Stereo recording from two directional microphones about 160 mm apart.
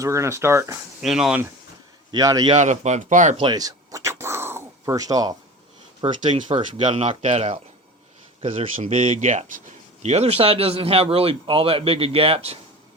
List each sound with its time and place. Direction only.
0.0 s speech: 20° right (ahead or behind)
1.0 s speech: 5° right (ahead or behind)
2.1 s a man's voice: 20° right (ahead or behind)
2.5 s speech: 45° right (ahead or behind)
3.3 s a sound: 30° right (ahead or behind)
6.0 s a man's voice: 30° right (ahead or behind)
7.0 s speech: 45° right (ahead or behind)
8.4 s a man's voice: 35° right (ahead or behind)
9.1 s a man's voice: 50° right (ahead or behind)